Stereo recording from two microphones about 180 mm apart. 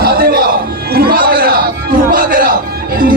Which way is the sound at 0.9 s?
55° right (ahead or behind).